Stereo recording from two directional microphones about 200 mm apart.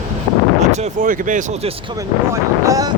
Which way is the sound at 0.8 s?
40° right (ahead or behind).